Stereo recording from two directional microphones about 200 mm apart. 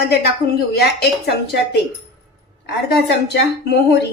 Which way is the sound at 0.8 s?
55° left (ahead or behind).